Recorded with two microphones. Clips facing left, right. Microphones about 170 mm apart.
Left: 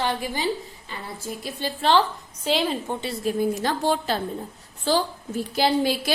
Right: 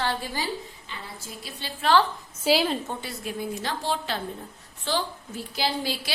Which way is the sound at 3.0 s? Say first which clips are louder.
Left 8 dB; 40° left (ahead or behind).